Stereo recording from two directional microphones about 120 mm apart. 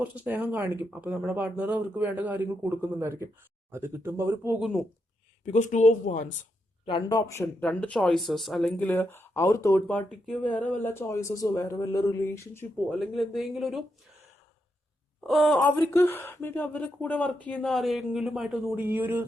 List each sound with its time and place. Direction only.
0.0 s speech: 15° right (ahead or behind)
5.5 s speech: 90° left
7.1 s speech: 25° left (ahead or behind)
7.6 s speech: 10° left (ahead or behind)
8.8 s speech: 15° left (ahead or behind)
9.8 s speech: 10° left (ahead or behind); by 12.1 s 30° left (ahead or behind)
12.2 s speech: 20° left (ahead or behind)
13.1 s speech: centre (ahead or behind)
15.3 s speech: centre (ahead or behind)
15.6 s speech: 20° left (ahead or behind); by 19.2 s 15° right (ahead or behind)